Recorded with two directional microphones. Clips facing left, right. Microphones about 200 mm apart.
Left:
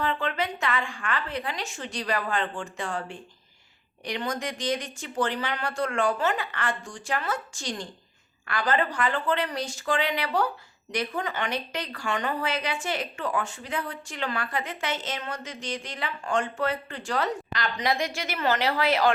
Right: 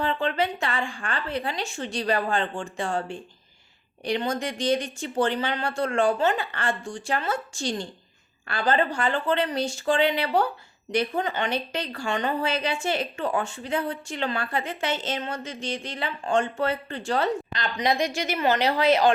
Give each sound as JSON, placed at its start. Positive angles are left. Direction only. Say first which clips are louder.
{"t": 0.0, "sound": "a woman's voice", "louder": "right 3 dB", "side_deg": -30}